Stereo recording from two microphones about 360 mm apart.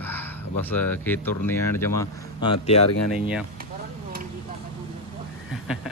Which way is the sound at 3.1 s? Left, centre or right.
Centre.